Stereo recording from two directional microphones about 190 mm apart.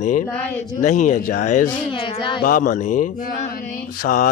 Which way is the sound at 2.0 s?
25° left (ahead or behind).